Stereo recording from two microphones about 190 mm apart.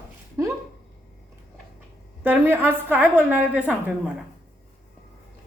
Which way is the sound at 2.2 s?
10° right (ahead or behind).